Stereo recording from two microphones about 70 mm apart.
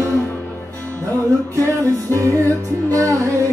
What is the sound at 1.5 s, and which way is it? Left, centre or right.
Music, right.